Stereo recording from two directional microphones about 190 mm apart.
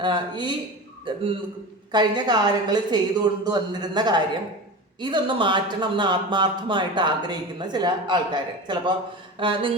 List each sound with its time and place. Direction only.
0.0 s speech: 25° right (ahead or behind)